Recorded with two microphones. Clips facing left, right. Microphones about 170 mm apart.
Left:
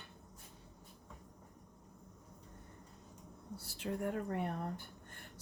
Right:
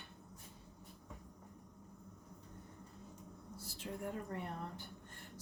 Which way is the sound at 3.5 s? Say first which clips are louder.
Left 6 dB; 65° left (ahead or behind).